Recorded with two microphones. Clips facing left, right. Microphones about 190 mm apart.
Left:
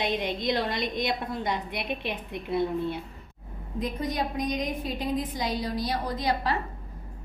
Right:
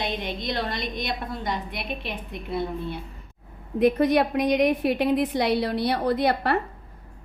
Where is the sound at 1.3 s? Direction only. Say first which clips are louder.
Even; 20° left (ahead or behind).